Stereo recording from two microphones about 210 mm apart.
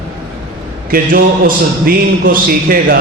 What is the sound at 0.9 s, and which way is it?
A man's voice, 45° right (ahead or behind).